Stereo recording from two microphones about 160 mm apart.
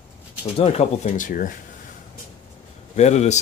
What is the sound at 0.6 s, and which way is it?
Speech, 40° left (ahead or behind).